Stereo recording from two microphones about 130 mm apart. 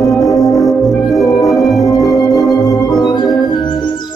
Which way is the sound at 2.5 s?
25° left (ahead or behind).